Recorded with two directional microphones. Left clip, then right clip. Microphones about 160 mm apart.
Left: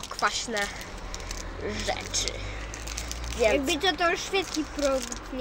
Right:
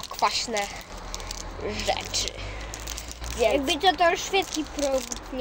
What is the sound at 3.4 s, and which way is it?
Speech, 15° left (ahead or behind).